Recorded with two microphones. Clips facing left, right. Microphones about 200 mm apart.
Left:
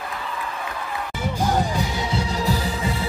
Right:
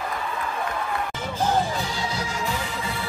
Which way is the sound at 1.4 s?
15° left (ahead or behind).